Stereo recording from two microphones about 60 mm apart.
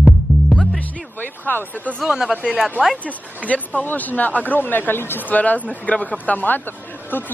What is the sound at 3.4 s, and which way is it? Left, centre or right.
Speech, left.